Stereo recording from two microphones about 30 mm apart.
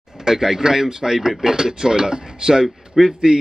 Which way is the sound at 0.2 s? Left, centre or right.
Centre.